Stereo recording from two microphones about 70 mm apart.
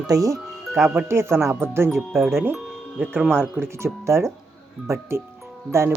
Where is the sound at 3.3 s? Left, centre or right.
Right.